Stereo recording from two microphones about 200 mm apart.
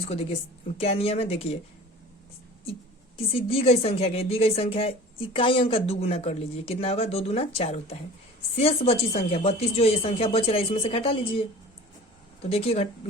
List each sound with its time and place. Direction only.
0.0 s a woman's voice: 30° left (ahead or behind)
3.2 s a woman's voice: 30° left (ahead or behind)
12.5 s a woman's voice: 30° left (ahead or behind)